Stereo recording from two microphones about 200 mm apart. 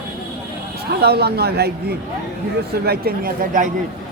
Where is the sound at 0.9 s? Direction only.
55° right (ahead or behind).